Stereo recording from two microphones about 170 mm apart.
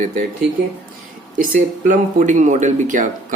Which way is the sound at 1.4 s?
55° right (ahead or behind).